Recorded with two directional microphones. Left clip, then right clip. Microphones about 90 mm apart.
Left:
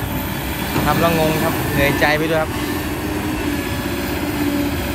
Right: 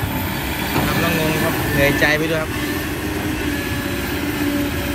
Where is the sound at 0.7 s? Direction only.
35° left (ahead or behind).